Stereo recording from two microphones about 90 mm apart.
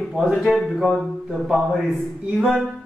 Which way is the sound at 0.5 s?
Centre (ahead or behind).